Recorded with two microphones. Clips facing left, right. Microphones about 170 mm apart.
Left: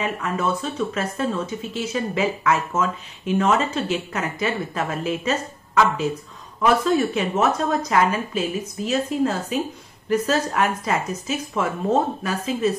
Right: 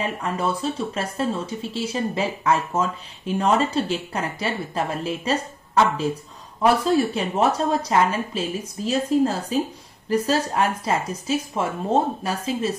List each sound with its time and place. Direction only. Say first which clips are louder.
0.0 s speech: left 1 dB; 30° right (ahead or behind)